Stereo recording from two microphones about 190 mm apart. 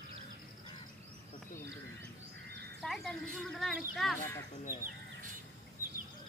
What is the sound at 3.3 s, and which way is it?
Speech, centre (ahead or behind).